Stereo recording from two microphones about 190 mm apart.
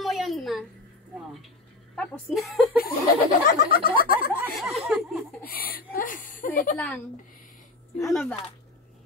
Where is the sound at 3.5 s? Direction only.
50° left (ahead or behind).